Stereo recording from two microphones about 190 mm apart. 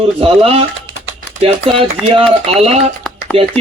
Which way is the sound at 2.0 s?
30° right (ahead or behind).